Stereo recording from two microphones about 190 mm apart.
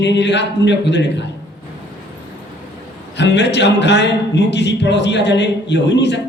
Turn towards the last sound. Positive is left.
turn(degrees=65)  # may be behind; listen again after turning